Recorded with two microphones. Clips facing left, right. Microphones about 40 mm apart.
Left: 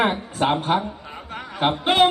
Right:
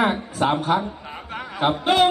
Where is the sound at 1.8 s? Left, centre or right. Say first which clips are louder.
Left 1 dB; left.